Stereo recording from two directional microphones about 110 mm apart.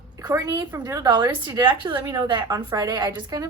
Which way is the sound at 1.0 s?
45° right (ahead or behind).